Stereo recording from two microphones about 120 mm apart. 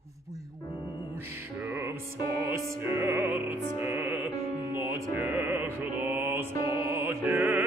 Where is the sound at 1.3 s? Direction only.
15° right (ahead or behind).